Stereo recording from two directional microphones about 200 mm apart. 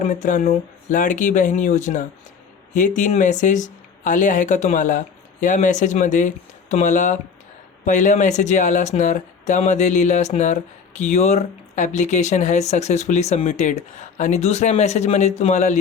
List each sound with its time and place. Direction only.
0.0 s speech: 40° left (ahead or behind)